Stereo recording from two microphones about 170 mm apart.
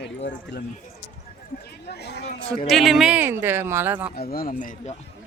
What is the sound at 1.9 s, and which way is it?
Speech, 75° left (ahead or behind).